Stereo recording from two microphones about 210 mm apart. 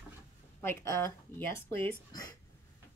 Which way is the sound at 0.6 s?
10° left (ahead or behind).